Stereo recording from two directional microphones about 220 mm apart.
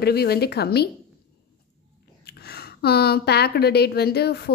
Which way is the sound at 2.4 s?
45° left (ahead or behind).